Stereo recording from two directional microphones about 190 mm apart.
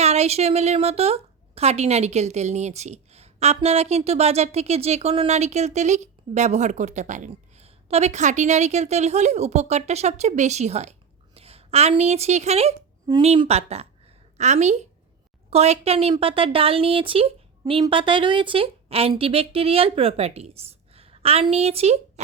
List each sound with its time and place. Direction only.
0.0 s a woman's voice: 35° right (ahead or behind)